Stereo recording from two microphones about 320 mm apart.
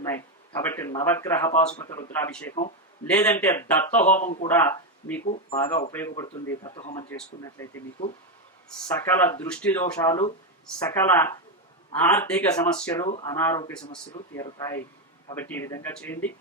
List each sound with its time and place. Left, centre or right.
0.0 s a man's voice: centre
4.2 s speech: left
4.4 s speech: centre
8.9 s speech: centre
13.1 s speech: centre